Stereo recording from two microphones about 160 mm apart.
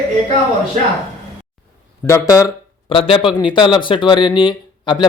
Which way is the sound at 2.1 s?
20° left (ahead or behind).